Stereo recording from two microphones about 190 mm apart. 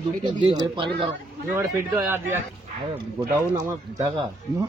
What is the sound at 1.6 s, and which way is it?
Speech, 10° right (ahead or behind).